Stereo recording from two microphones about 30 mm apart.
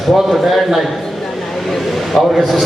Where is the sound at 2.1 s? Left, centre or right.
Centre.